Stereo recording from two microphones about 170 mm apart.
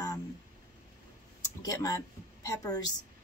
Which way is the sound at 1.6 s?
20° left (ahead or behind).